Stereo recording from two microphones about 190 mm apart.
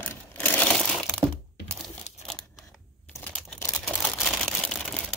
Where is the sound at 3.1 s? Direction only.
10° left (ahead or behind).